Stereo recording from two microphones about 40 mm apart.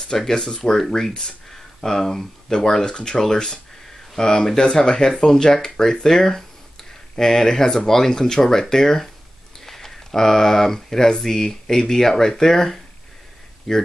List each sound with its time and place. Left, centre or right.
0.3 s speech: centre